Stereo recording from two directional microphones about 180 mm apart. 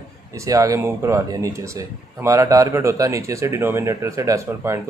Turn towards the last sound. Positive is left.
turn(degrees=-15)  # may be behind; listen again after turning